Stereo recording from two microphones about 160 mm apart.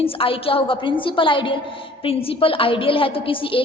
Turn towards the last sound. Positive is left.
turn(degrees=35)  # may be behind; listen again after turning